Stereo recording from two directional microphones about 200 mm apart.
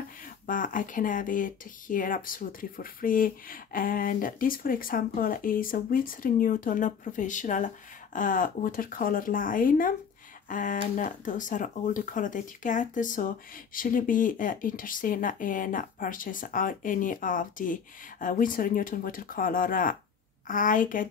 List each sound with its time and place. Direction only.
0.2 s speech: 40° left (ahead or behind)